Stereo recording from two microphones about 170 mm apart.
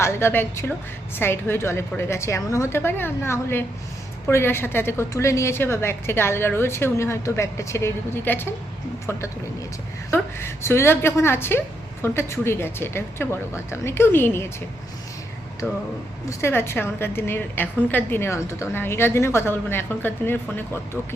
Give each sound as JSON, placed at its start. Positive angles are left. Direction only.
{"t": 0.0, "sound": "a woman's voice", "side_deg": 15}
{"t": 10.1, "sound": "a woman's voice", "side_deg": 15}
{"t": 15.6, "sound": "a woman's voice", "side_deg": 10}